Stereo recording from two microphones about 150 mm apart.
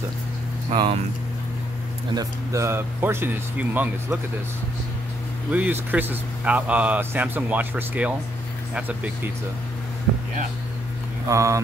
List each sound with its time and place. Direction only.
0.7 s speech: 35° right (ahead or behind)
2.1 s speech: 20° right (ahead or behind)
5.5 s speech: 10° right (ahead or behind)
11.2 s speech: 20° right (ahead or behind)